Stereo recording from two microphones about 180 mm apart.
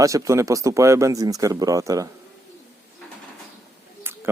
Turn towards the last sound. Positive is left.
turn(degrees=-15)  # may be behind; listen again after turning